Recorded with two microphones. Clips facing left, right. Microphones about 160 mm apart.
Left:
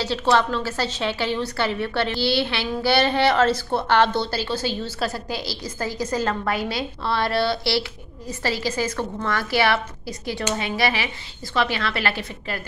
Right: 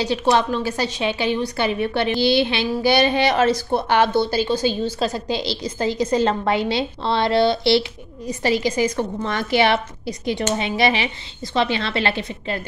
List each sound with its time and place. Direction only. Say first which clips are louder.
0.0 s a woman's voice: right 2 dB; 15° right (ahead or behind)